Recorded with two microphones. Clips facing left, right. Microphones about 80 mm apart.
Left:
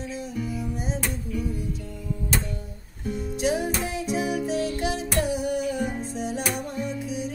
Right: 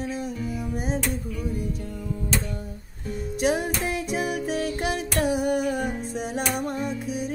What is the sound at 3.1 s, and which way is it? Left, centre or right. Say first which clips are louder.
Music: right 1 dB; right.